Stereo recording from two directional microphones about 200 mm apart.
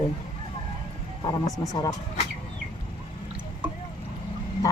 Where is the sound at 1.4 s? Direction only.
15° left (ahead or behind).